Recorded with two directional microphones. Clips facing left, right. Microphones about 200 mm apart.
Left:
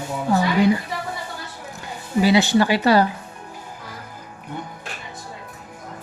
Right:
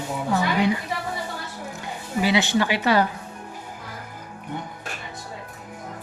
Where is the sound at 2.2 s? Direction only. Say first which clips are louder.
Left 4 dB; 35° left (ahead or behind).